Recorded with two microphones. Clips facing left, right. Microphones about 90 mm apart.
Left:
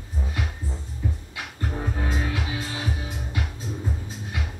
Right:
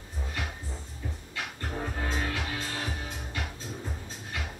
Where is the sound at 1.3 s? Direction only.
5° left (ahead or behind).